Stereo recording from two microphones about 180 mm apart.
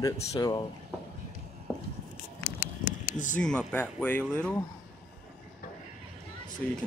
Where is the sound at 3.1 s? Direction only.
45° left (ahead or behind).